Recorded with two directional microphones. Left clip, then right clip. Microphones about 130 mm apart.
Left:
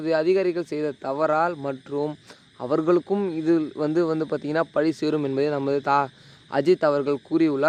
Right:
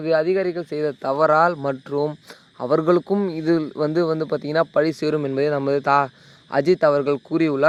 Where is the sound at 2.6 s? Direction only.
40° right (ahead or behind).